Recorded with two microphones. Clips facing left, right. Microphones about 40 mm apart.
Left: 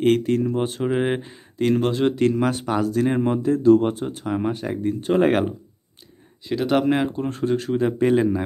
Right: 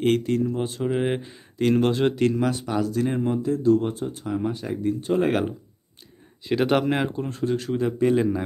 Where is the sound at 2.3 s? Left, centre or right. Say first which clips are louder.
Left 2 dB; left.